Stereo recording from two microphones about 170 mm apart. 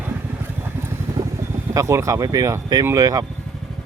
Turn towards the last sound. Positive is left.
turn(degrees=-20)  # may be behind; listen again after turning